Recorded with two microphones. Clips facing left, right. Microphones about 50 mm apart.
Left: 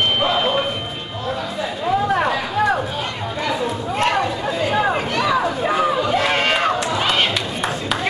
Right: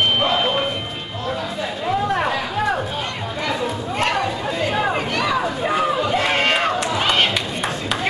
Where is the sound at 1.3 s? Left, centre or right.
Centre.